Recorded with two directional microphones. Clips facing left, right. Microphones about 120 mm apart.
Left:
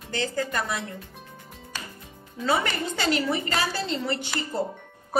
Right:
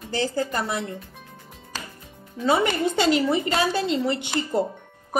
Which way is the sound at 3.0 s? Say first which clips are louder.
Right 4 dB; 25° right (ahead or behind).